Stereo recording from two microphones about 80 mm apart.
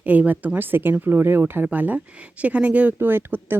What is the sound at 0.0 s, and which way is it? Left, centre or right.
Speech, centre.